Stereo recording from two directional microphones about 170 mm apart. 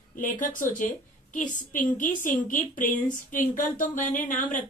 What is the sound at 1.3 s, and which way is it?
A woman's voice, 50° left (ahead or behind).